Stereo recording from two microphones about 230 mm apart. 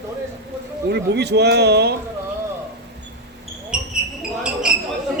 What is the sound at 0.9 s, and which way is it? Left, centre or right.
A man's voice, right.